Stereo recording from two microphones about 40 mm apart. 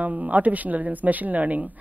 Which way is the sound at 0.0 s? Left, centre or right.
Right.